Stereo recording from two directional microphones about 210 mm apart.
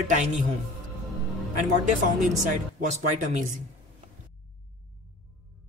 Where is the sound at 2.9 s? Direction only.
35° right (ahead or behind).